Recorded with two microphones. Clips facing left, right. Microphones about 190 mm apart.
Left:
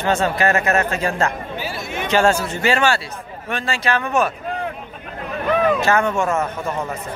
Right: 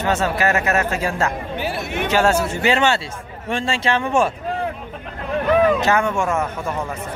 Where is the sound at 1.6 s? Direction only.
60° right (ahead or behind).